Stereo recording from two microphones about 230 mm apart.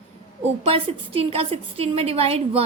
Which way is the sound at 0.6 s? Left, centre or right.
Right.